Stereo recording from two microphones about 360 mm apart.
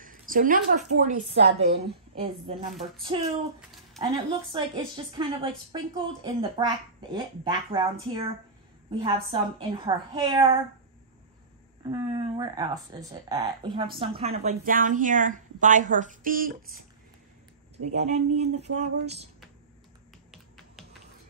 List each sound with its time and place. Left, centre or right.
0.0 s a sound: right
0.9 s a child's voice: right
11.8 s a child's voice: centre
17.9 s a child's voice: centre
20.2 s finger snapping: centre